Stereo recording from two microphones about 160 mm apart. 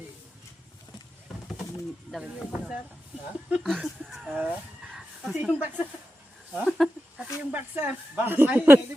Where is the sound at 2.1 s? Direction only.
5° right (ahead or behind).